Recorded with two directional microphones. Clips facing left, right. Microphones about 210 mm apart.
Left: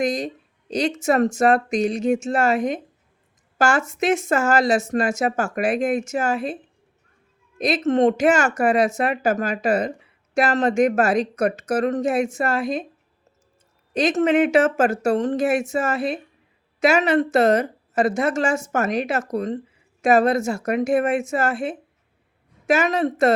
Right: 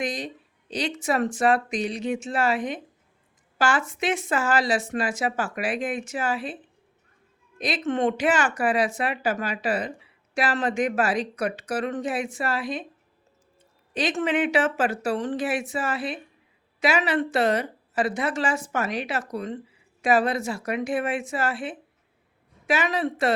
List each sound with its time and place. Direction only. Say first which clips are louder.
0.0 s speech: left 7 dB; 45° left (ahead or behind)
7.6 s speech: left 6 dB; 40° left (ahead or behind)
13.9 s speech: left 6 dB; 45° left (ahead or behind)